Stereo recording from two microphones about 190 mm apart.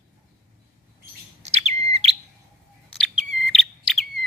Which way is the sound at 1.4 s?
35° right (ahead or behind).